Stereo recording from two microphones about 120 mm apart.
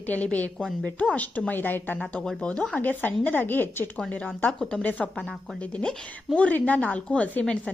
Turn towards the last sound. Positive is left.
turn(degrees=10)  # may be behind; listen again after turning